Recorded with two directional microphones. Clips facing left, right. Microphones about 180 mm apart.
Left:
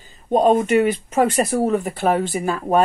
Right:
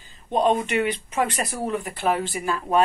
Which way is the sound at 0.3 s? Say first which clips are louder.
Left 6 dB; 45° left (ahead or behind).